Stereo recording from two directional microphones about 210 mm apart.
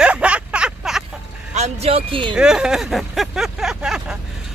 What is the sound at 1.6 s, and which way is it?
Speech, 30° right (ahead or behind).